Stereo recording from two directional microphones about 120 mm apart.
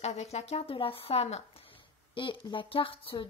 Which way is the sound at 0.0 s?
65° left (ahead or behind).